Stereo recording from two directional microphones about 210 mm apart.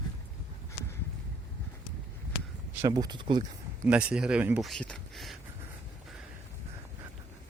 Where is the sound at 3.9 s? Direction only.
5° right (ahead or behind).